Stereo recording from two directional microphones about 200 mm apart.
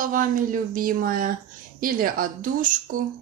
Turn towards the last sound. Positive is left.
turn(degrees=-40)  # may be behind; listen again after turning